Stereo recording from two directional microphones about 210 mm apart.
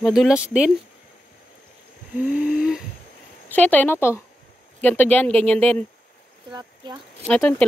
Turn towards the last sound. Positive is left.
turn(degrees=5)  # may be behind; listen again after turning